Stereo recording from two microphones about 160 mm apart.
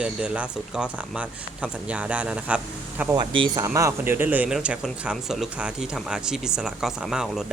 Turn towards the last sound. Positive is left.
turn(degrees=0)  # may be behind; listen again after turning